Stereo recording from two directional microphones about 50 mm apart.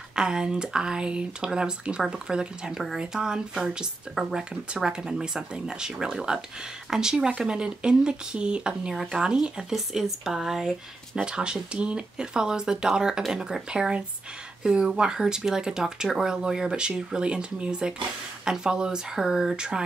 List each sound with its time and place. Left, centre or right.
0.1 s speech: centre